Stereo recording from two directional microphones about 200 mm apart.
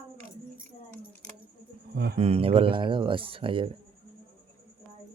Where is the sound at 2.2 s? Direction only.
30° right (ahead or behind).